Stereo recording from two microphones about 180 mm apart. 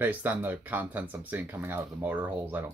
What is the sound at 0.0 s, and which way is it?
Speech, 10° right (ahead or behind).